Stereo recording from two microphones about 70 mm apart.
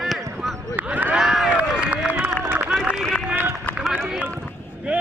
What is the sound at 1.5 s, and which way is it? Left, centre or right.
Run, centre.